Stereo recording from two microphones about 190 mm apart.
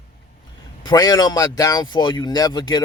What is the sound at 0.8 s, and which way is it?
Speech, 20° left (ahead or behind).